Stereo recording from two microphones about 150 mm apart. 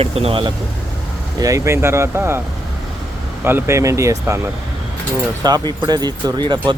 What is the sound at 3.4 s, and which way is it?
Speech, 15° right (ahead or behind).